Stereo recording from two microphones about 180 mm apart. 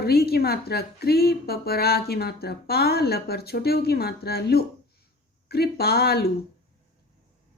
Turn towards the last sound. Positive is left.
turn(degrees=60)  # may be behind; listen again after turning